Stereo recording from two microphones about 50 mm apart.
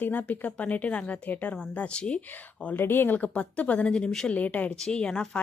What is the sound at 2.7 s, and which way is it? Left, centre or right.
Speech, left.